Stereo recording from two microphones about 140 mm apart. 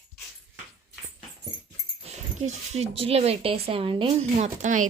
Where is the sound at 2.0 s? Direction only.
50° right (ahead or behind).